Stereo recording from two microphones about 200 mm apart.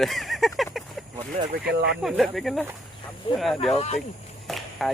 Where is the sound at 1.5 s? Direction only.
55° right (ahead or behind).